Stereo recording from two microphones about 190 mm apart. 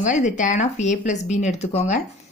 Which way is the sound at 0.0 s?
40° left (ahead or behind).